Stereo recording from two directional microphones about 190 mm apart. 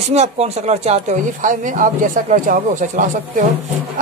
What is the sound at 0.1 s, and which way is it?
A woman's voice, 35° right (ahead or behind).